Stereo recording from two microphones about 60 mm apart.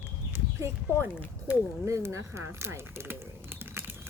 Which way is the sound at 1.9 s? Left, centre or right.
Right.